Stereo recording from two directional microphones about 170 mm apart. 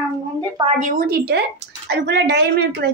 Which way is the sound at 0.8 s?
55° right (ahead or behind).